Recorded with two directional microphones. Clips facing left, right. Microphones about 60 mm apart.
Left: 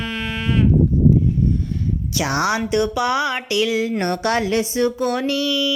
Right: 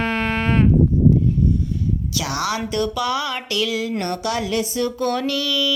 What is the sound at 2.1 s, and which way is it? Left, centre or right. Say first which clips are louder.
A woman's voice: left 6 dB; left.